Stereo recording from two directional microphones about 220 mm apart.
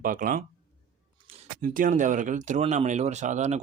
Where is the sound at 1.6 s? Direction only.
40° right (ahead or behind).